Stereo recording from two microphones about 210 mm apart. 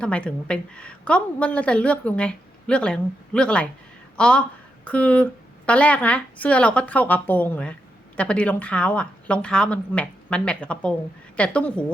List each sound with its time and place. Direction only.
0.0 s a woman's voice: 5° left (ahead or behind)